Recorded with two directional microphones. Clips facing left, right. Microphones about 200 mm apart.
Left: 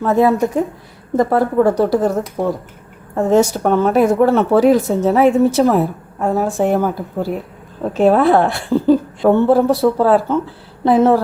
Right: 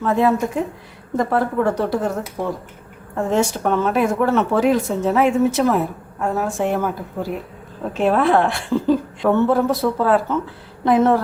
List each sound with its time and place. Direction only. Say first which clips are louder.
0.0 s speech: left 4 dB; 40° left (ahead or behind)
2.4 s speech: left 5 dB; 50° left (ahead or behind); by 11.2 s 30° left (ahead or behind)